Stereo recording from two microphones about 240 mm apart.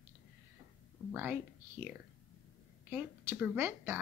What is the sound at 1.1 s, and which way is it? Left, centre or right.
Speech, centre.